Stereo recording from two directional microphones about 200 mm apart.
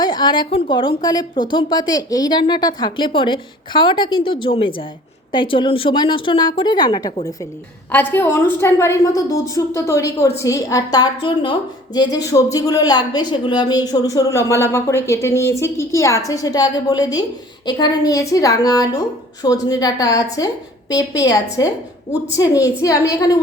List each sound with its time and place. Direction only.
0.0 s a woman's voice: 20° left (ahead or behind)
7.9 s a woman's voice: 10° left (ahead or behind)